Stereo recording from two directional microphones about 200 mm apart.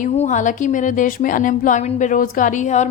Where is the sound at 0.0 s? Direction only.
40° left (ahead or behind).